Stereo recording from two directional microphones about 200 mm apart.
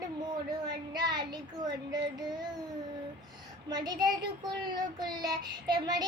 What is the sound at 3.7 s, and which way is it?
Child singing, 20° right (ahead or behind).